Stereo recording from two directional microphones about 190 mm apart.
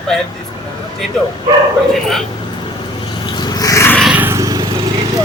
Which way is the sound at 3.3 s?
20° left (ahead or behind).